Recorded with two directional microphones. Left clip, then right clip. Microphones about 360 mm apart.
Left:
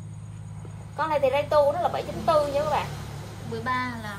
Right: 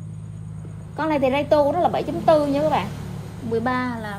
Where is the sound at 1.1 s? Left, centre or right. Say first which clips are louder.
Right 3 dB; centre.